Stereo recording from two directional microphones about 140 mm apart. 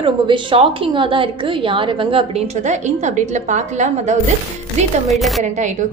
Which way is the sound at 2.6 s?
55° right (ahead or behind).